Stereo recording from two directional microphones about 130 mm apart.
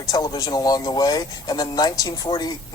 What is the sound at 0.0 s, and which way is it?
Speech, 30° left (ahead or behind).